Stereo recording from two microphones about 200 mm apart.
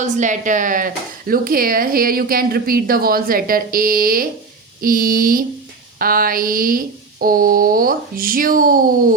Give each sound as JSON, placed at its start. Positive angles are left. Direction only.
{"t": 0.0, "sound": "speech", "side_deg": -40}